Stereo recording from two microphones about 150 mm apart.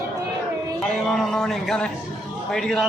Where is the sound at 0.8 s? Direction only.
Centre (ahead or behind).